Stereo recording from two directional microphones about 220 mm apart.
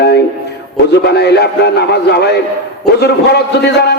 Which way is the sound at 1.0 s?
50° left (ahead or behind).